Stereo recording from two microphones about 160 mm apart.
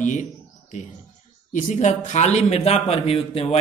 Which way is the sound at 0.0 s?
50° left (ahead or behind).